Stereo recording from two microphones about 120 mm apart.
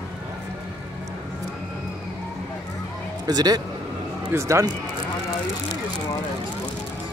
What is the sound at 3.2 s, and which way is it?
A man's voice, 30° right (ahead or behind).